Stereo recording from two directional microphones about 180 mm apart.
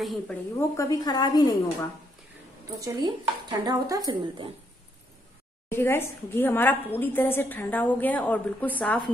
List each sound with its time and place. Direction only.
0.0 s a woman's voice: centre (ahead or behind)
0.6 s a woman's voice: 20° left (ahead or behind)
2.8 s speech: 25° right (ahead or behind)
5.7 s a woman's voice: 15° left (ahead or behind)